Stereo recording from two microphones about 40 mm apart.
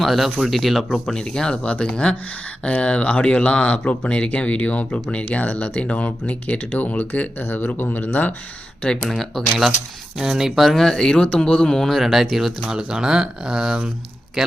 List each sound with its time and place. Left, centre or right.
0.0 s speech: centre
1.2 s speech: left
1.6 s speech: left
1.9 s speech: left
9.0 s speech: centre
10.2 s speech: centre
10.7 s speech: centre
11.9 s speech: centre
12.7 s a man's voice: centre